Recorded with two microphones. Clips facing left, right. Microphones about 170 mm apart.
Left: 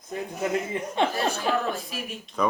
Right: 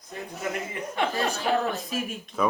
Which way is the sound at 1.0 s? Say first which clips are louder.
Left 3 dB; 25° left (ahead or behind).